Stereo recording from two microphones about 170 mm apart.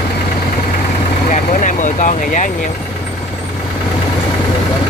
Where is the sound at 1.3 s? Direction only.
50° left (ahead or behind).